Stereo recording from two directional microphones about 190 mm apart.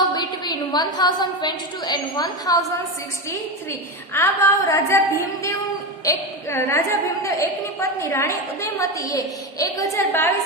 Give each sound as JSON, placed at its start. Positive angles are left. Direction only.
{"t": 0.1, "sound": "a woman's voice", "side_deg": 20}